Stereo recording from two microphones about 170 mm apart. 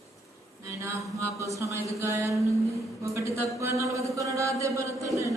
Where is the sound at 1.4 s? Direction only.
15° right (ahead or behind).